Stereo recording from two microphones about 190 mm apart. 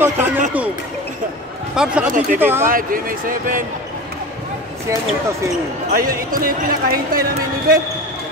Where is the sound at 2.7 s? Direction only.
45° right (ahead or behind).